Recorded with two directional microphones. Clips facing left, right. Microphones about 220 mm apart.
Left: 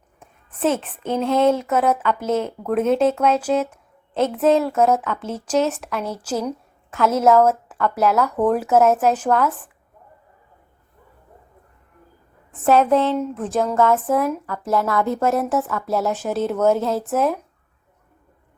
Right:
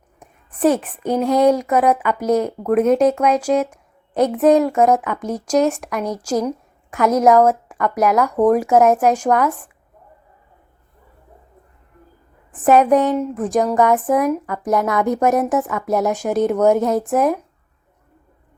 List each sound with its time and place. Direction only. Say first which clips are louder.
0.2 s a sound: right 5 dB; 15° right (ahead or behind)
0.9 s a woman's voice: right 3 dB; 15° right (ahead or behind)
12.5 s a woman's voice: right 3 dB; 15° right (ahead or behind)